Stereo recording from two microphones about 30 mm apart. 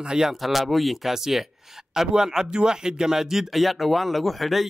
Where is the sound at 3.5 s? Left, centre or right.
Centre.